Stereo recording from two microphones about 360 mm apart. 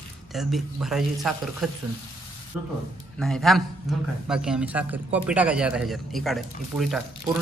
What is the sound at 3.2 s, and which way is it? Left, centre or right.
A man's voice, centre.